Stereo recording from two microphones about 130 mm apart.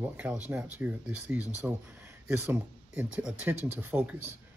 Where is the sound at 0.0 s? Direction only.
10° right (ahead or behind).